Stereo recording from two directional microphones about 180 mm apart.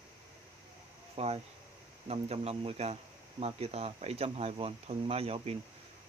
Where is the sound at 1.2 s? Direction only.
35° right (ahead or behind).